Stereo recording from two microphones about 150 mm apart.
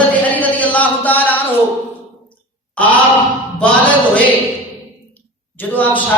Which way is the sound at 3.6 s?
10° left (ahead or behind).